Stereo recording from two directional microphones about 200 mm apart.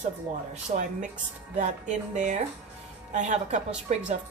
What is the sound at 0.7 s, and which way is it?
Speech, 40° right (ahead or behind).